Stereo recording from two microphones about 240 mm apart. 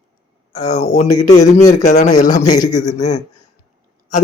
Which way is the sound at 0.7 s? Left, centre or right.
Left.